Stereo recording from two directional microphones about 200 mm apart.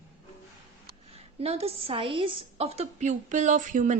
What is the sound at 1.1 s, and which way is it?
A woman's voice, 30° right (ahead or behind).